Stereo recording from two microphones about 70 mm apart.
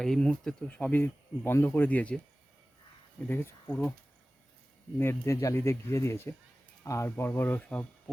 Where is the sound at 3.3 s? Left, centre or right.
Left.